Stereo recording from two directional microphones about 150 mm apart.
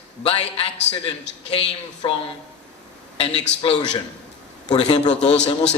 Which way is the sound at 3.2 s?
40° left (ahead or behind).